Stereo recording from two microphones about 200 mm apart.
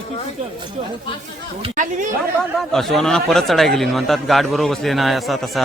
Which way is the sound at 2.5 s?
Centre (ahead or behind).